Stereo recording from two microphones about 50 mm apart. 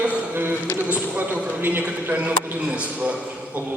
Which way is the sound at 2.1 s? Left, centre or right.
Right.